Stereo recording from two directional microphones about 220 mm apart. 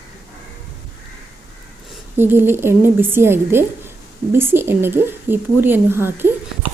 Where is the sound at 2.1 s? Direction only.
10° right (ahead or behind).